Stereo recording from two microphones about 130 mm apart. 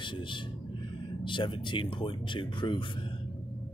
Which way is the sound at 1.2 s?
40° left (ahead or behind).